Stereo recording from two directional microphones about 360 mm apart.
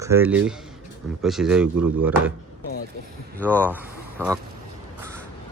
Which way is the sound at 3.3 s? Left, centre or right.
Centre.